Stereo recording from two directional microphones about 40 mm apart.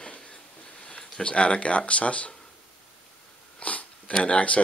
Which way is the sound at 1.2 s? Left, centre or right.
Left.